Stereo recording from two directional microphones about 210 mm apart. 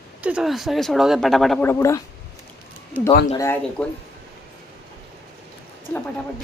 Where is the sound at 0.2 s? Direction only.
5° right (ahead or behind); by 2.0 s 10° left (ahead or behind).